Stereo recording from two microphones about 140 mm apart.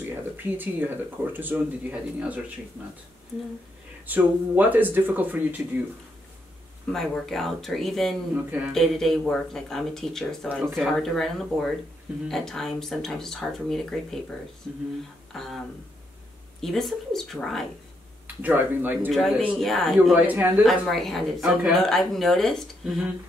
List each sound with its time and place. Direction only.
0.1 s speech: 15° right (ahead or behind)
4.1 s speech: 15° right (ahead or behind)
6.9 s speech: 5° left (ahead or behind)
8.5 s speech: 10° right (ahead or behind)
8.7 s speech: centre (ahead or behind)
16.6 s speech: centre (ahead or behind)
18.2 s speech: 15° right (ahead or behind)
19.0 s speech: centre (ahead or behind)
20.2 s speech: 10° right (ahead or behind)
20.6 s speech: centre (ahead or behind)